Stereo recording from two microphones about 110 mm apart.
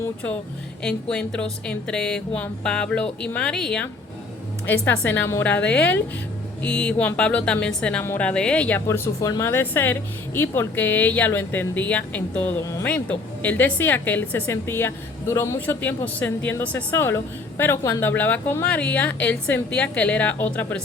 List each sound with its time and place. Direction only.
1.1 s a woman's voice: 10° left (ahead or behind)
4.6 s a woman's voice: 15° left (ahead or behind)
8.9 s a woman's voice: 30° left (ahead or behind)